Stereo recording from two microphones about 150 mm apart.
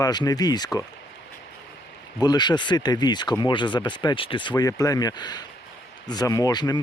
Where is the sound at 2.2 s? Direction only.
30° left (ahead or behind).